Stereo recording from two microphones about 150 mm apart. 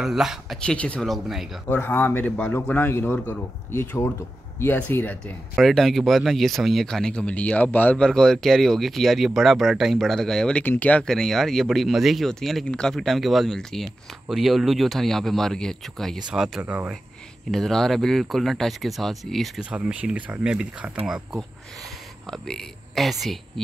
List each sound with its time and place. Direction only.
0.0 s speech: centre (ahead or behind)
1.7 s speech: 10° left (ahead or behind); by 16.9 s 10° right (ahead or behind)
17.5 s speech: centre (ahead or behind)
22.2 s speech: 5° left (ahead or behind)